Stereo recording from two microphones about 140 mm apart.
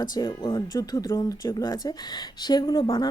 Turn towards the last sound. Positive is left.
turn(degrees=30)  # may be behind; listen again after turning